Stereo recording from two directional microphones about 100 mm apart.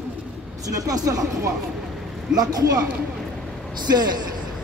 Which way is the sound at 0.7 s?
40° right (ahead or behind).